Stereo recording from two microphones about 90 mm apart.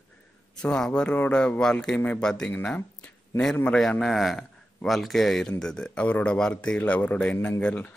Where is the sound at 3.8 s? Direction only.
5° left (ahead or behind).